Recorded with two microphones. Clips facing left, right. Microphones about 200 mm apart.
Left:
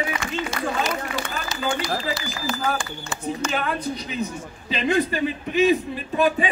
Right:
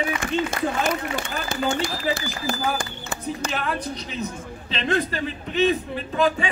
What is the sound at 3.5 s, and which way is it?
A man's voice, 5° left (ahead or behind).